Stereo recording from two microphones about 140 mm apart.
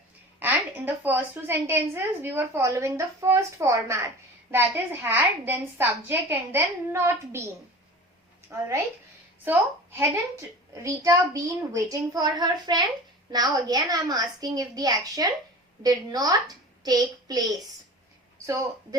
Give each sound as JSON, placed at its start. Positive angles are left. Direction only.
{"t": 0.3, "sound": "a woman's voice", "side_deg": -15}